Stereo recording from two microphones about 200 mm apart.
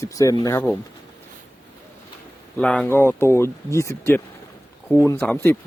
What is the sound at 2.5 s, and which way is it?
Speech, 5° left (ahead or behind).